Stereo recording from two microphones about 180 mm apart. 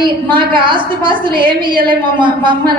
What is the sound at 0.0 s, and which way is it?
A woman's voice, 25° right (ahead or behind).